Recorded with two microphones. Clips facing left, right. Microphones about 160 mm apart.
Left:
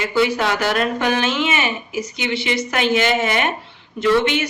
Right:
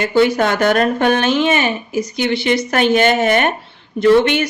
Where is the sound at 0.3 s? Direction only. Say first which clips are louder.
Right 5 dB; 50° right (ahead or behind).